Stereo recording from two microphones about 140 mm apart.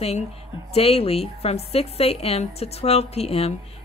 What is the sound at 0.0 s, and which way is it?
A woman's voice, 45° left (ahead or behind).